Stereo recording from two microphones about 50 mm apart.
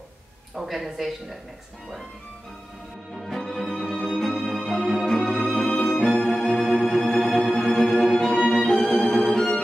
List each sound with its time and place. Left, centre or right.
0.6 s speech: centre
3.2 s music: centre
5.2 s music: centre
8.3 s music: centre